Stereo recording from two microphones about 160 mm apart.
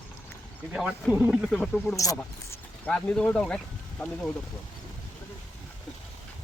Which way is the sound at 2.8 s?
5° left (ahead or behind).